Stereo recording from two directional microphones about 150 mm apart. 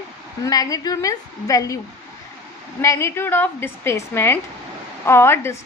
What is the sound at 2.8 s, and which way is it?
A woman's voice, 20° left (ahead or behind).